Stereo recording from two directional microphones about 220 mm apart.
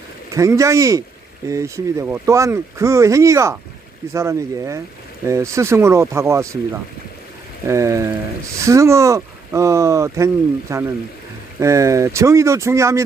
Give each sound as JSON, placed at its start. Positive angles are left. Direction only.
{"t": 0.3, "sound": "speech", "side_deg": -15}
{"t": 7.7, "sound": "speech", "side_deg": -15}